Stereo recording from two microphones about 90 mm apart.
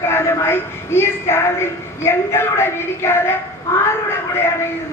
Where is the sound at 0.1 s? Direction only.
25° left (ahead or behind).